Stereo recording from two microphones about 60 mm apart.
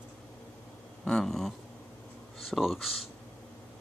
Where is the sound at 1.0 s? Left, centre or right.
Centre.